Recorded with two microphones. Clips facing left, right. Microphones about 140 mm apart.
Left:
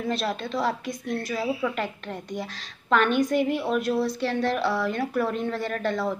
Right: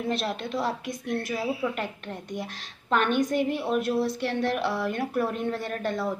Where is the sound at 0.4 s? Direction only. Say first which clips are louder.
Left 2 dB; 15° right (ahead or behind).